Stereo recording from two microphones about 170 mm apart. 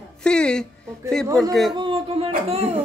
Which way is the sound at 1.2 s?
20° right (ahead or behind).